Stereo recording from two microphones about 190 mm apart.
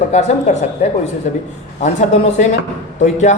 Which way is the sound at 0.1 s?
40° left (ahead or behind).